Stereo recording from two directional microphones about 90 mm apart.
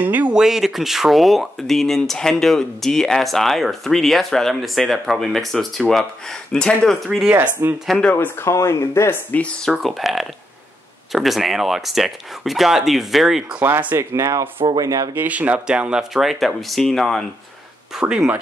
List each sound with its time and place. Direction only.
0.0 s a sound: 15° right (ahead or behind)
0.4 s speech: 5° right (ahead or behind)
7.1 s speech: 5° right (ahead or behind)
7.6 s speech: 30° right (ahead or behind)
8.1 s speech: 20° left (ahead or behind)
8.5 s speech: 30° left (ahead or behind)
9.3 s speech: 15° left (ahead or behind)
9.7 s speech: centre (ahead or behind)
13.6 s speech: 20° right (ahead or behind)
14.1 s speech: 35° right (ahead or behind)
15.1 s speech: 15° right (ahead or behind); by 17.2 s 5° left (ahead or behind)
18.0 s speech: 15° right (ahead or behind)